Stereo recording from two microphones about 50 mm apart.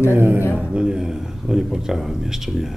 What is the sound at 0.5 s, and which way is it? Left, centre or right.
A man's voice, centre.